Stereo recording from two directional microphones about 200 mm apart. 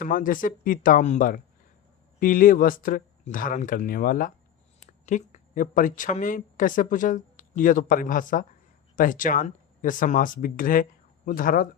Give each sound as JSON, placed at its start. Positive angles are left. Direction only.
{"t": 0.0, "sound": "speech", "side_deg": 40}